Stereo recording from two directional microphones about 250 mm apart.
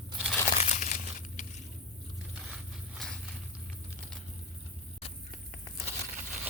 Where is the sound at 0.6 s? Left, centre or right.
Left.